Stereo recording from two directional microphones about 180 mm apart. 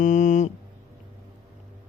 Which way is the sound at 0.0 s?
45° left (ahead or behind).